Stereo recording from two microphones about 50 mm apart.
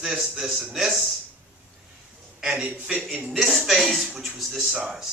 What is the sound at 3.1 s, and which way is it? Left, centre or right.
Speech, right.